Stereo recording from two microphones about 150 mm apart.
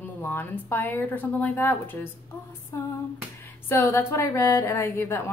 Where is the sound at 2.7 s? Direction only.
20° left (ahead or behind).